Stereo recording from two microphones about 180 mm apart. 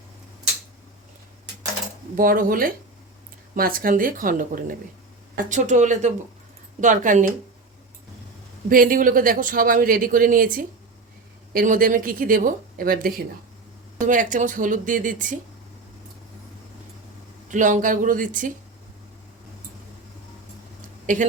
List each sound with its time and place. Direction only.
2.1 s speech: 50° right (ahead or behind)
8.7 s speech: 50° right (ahead or behind)
17.5 s speech: 45° right (ahead or behind)
21.1 s speech: 45° right (ahead or behind)